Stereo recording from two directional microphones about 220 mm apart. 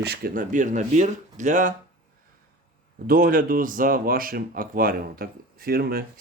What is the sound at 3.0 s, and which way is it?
Speech, 40° right (ahead or behind).